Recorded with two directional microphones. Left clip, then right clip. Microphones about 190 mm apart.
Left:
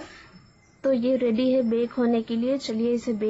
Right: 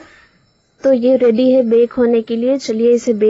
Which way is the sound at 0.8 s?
25° right (ahead or behind).